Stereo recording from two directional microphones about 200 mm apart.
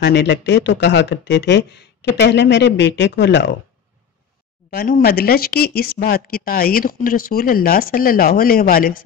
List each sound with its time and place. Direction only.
0.0 s speech: 60° left (ahead or behind)
4.6 s speech: 45° left (ahead or behind)